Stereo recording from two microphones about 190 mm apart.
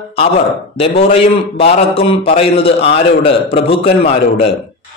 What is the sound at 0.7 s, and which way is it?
A man's voice, 30° left (ahead or behind).